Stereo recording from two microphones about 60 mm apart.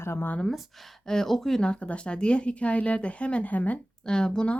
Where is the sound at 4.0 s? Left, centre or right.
Centre.